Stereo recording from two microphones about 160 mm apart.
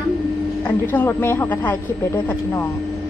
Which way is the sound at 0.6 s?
10° left (ahead or behind).